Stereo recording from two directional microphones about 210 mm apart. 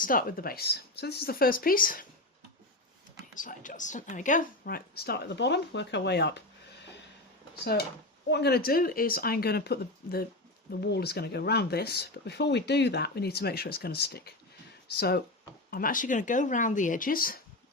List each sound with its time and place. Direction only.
0.0 s speech: 40° left (ahead or behind)
3.3 s speech: 40° left (ahead or behind)
7.5 s speech: 50° left (ahead or behind)